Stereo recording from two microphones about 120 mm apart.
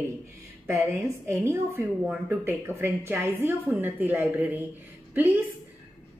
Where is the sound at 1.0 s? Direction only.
20° right (ahead or behind).